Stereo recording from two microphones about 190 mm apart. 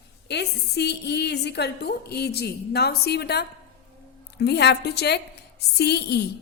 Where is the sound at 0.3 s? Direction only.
60° left (ahead or behind).